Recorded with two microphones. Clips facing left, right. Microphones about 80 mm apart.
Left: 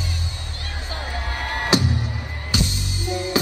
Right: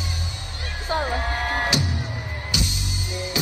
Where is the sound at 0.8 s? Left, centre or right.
Right.